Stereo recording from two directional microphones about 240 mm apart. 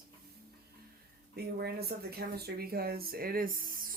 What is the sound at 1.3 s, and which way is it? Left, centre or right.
Speech, right.